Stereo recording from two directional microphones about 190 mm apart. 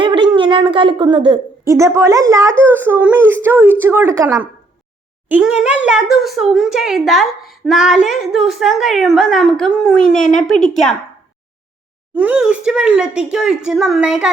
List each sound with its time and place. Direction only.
0.0 s a woman's voice: 25° right (ahead or behind)
5.3 s speech: 5° right (ahead or behind)
12.1 s speech: 5° right (ahead or behind)